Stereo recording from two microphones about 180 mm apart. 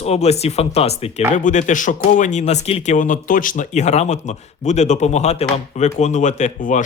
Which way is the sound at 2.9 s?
45° left (ahead or behind).